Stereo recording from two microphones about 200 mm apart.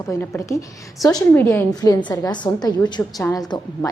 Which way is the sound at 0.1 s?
15° left (ahead or behind).